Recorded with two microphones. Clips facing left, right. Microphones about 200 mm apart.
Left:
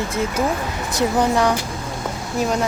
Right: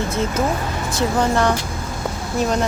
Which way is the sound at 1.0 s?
15° left (ahead or behind).